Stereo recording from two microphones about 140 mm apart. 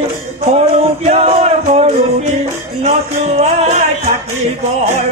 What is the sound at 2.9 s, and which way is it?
Music, 50° right (ahead or behind).